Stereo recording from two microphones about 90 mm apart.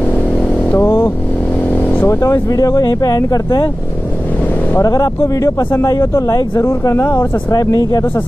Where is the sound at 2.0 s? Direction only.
35° left (ahead or behind).